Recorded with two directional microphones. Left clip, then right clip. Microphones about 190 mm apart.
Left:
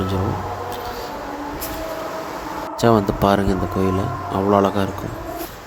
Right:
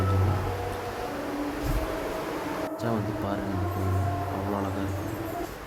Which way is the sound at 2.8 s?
40° left (ahead or behind).